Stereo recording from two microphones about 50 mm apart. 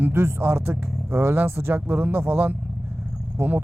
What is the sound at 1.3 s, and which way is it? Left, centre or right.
Speech, right.